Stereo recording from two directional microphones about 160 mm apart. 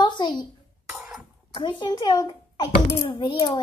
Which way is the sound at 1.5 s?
30° left (ahead or behind).